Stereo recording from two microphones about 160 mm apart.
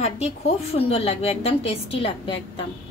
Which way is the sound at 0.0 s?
40° left (ahead or behind).